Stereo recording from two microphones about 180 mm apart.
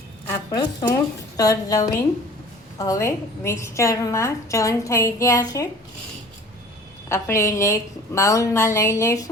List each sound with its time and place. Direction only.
0.3 s a woman's voice: 20° left (ahead or behind)
7.1 s a woman's voice: 15° left (ahead or behind)